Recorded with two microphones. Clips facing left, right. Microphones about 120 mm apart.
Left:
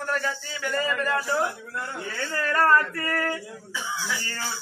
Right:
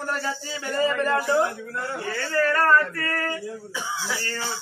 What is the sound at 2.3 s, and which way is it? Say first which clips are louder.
A man's voice: right 1 dB; 15° left (ahead or behind).